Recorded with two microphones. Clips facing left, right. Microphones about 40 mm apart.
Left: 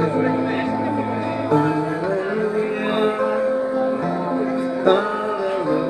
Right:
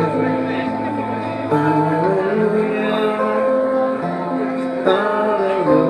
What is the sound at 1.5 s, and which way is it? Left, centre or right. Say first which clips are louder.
Music: right 5 dB; centre.